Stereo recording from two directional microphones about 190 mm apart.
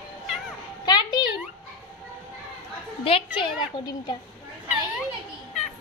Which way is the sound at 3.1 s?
25° left (ahead or behind).